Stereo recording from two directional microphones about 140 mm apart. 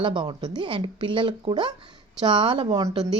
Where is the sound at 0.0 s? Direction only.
35° right (ahead or behind).